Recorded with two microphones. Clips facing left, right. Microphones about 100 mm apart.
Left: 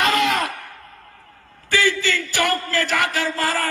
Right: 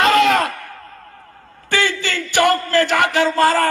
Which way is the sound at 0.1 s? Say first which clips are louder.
Right 6 dB; 90° right.